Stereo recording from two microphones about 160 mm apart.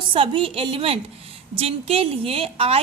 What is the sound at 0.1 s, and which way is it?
A woman's voice, 35° right (ahead or behind).